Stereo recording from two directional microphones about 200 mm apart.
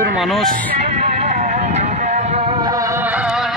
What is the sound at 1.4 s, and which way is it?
Music, 35° right (ahead or behind).